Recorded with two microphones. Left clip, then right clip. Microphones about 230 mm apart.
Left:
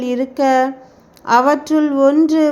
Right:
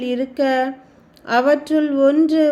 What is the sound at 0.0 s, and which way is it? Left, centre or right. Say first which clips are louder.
A woman's voice: left 3 dB; centre.